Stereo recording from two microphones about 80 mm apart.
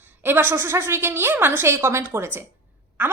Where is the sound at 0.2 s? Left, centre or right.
Right.